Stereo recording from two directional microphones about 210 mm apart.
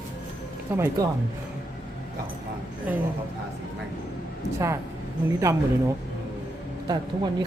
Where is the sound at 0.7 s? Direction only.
10° right (ahead or behind).